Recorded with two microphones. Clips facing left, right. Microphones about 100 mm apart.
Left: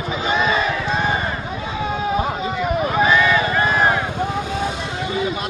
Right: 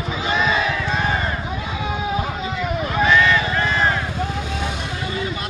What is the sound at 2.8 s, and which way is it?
Vehicle, 10° left (ahead or behind).